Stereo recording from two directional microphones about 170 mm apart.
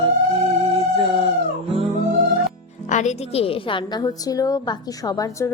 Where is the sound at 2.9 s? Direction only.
45° left (ahead or behind).